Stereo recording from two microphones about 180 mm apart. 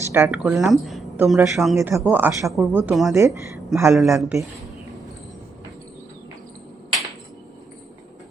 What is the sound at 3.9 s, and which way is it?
Speech, centre (ahead or behind).